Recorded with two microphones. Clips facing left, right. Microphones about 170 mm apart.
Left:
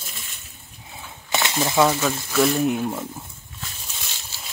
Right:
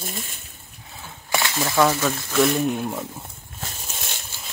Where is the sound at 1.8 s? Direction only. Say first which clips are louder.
Right 2 dB; 10° left (ahead or behind).